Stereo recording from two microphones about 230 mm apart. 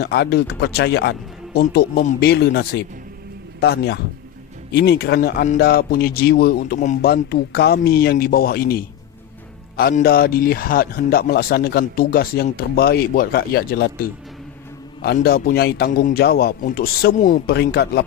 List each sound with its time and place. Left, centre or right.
0.0 s a man's voice: left